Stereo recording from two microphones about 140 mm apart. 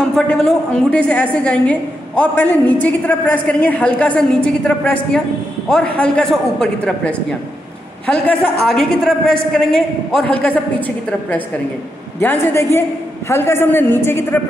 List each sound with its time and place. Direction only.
0.1 s a woman's voice: 5° left (ahead or behind)